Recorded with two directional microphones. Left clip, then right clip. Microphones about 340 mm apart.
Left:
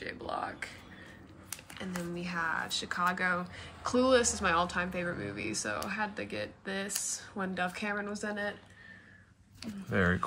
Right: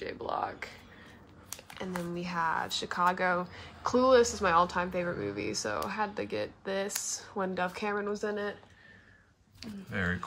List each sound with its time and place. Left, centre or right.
0.0 s typing: right
1.8 s speech: right
9.6 s speech: centre